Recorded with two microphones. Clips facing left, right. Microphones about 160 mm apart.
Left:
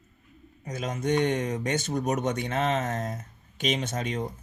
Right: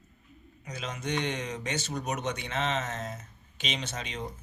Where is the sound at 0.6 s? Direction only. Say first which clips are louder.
Left 6 dB; 50° left (ahead or behind).